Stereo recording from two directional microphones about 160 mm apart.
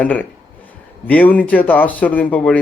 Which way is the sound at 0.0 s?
10° left (ahead or behind).